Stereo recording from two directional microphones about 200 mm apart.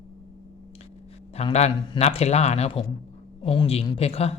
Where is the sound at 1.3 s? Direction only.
30° left (ahead or behind).